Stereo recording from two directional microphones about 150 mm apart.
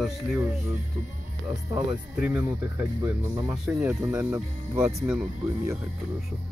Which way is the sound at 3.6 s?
15° right (ahead or behind).